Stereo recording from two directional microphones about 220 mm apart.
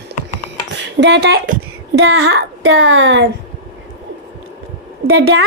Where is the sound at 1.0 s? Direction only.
50° right (ahead or behind).